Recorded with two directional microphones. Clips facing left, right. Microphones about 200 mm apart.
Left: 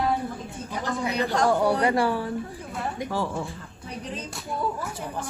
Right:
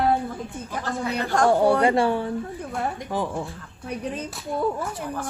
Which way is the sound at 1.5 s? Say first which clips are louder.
Right 5 dB; 25° right (ahead or behind).